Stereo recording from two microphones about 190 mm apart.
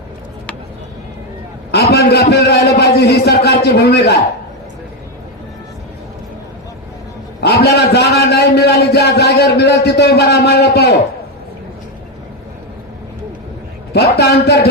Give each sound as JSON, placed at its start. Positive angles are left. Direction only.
{"t": 1.7, "sound": "a sound", "side_deg": 55}
{"t": 7.4, "sound": "a man's voice", "side_deg": 55}
{"t": 13.9, "sound": "a man's voice", "side_deg": 55}